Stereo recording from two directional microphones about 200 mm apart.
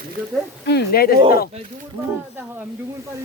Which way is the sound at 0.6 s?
50° left (ahead or behind).